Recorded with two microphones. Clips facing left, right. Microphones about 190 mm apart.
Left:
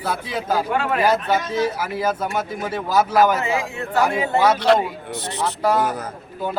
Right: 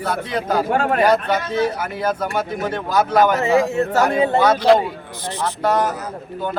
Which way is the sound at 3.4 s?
40° right (ahead or behind).